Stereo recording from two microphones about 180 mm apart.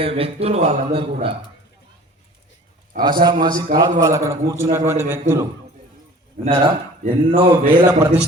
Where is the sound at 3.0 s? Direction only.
25° right (ahead or behind).